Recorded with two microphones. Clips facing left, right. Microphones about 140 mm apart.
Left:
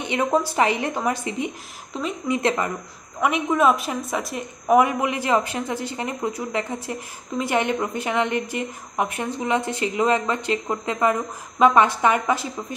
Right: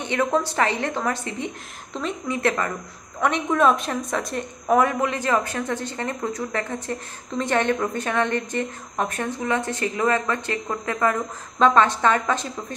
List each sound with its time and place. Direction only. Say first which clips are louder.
0.0 s a woman's voice: left 1 dB; 15° left (ahead or behind)
3.2 s a woman's voice: even; 5° left (ahead or behind)